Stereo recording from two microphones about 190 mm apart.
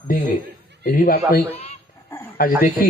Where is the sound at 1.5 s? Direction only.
35° left (ahead or behind).